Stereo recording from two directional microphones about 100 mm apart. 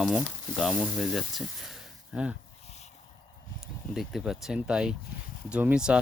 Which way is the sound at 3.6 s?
Centre (ahead or behind).